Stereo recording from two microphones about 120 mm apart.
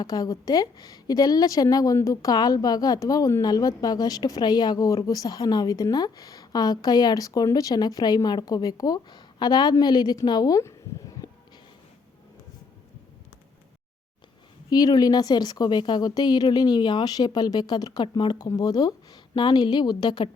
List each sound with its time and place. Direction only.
0.0 s a woman's voice: 30° left (ahead or behind)
14.7 s a woman's voice: 35° left (ahead or behind)